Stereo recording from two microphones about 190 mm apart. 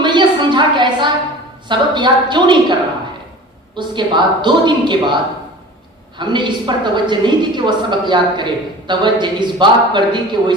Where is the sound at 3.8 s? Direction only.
25° right (ahead or behind).